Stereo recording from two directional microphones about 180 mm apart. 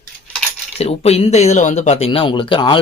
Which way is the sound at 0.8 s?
35° left (ahead or behind).